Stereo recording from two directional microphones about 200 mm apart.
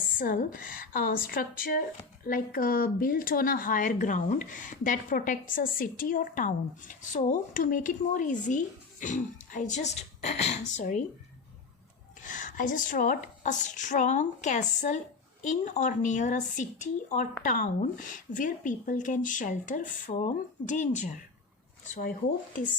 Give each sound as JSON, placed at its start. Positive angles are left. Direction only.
{"t": 0.2, "sound": "a woman's voice", "side_deg": 45}
{"t": 12.2, "sound": "speech", "side_deg": 40}